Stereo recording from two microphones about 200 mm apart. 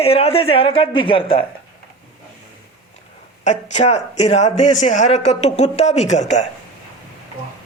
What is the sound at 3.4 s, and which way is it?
Speech, 35° left (ahead or behind).